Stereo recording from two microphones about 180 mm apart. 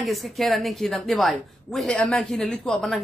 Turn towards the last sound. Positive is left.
turn(degrees=0)  # may be behind; listen again after turning